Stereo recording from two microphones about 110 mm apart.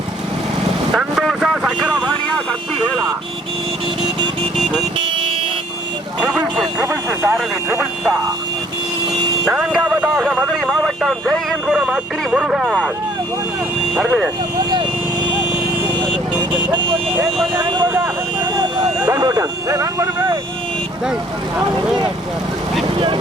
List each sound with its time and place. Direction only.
0.9 s vehicle: centre (ahead or behind)
4.5 s vehicle: centre (ahead or behind)
4.9 s vehicle: 50° right (ahead or behind)
6.2 s speech: centre (ahead or behind)
6.8 s speech: 20° right (ahead or behind)
9.4 s speech: 5° right (ahead or behind)
10.6 s speech: centre (ahead or behind)
13.9 s speech: centre (ahead or behind)
14.7 s vehicle: 45° right (ahead or behind)
16.0 s speech: 45° right (ahead or behind)
19.0 s speech: 40° right (ahead or behind)